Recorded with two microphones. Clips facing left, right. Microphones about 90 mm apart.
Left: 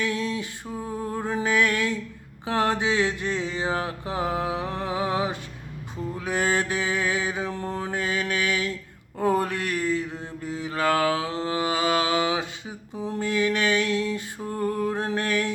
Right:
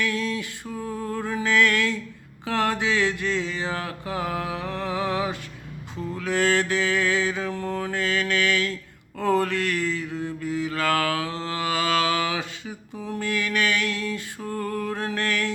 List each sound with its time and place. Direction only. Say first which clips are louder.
0.0 s music: even; 20° left (ahead or behind)
2.5 s mantra: even; 20° left (ahead or behind)